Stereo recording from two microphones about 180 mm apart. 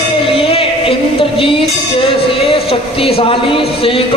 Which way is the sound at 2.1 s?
30° left (ahead or behind).